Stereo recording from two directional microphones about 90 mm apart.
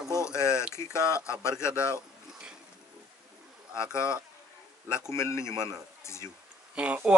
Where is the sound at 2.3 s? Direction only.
10° right (ahead or behind).